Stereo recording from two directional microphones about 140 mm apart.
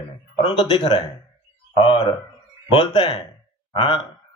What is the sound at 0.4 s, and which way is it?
A man's voice, 30° left (ahead or behind).